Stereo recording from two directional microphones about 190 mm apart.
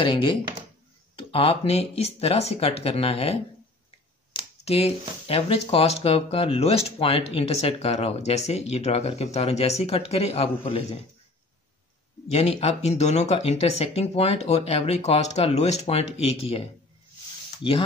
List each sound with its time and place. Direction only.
0.0 s speech: 25° left (ahead or behind)
12.3 s speech: 35° left (ahead or behind)